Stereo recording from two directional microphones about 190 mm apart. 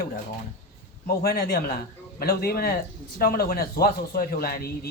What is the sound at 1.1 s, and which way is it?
A man's voice, 55° left (ahead or behind).